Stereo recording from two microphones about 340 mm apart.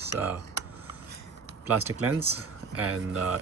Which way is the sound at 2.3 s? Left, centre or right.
Right.